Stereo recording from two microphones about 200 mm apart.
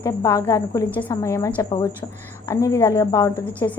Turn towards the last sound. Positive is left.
turn(degrees=15)  # may be behind; listen again after turning